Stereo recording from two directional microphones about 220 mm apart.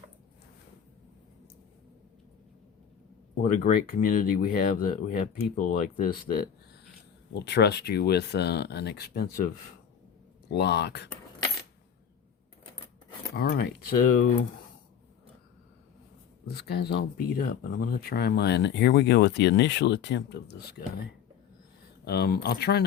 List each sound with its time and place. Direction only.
3.5 s speech: 35° left (ahead or behind)
10.5 s speech: 50° left (ahead or behind)
13.3 s speech: 45° left (ahead or behind)
16.5 s speech: 45° left (ahead or behind)
22.0 s speech: 45° left (ahead or behind)